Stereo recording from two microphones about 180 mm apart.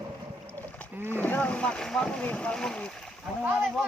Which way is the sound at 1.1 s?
10° left (ahead or behind).